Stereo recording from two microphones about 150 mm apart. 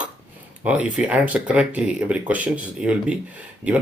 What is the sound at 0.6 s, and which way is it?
Speech, 10° right (ahead or behind).